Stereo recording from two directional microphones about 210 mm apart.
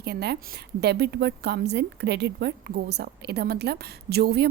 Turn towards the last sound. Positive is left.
turn(degrees=-50)  # may be behind; listen again after turning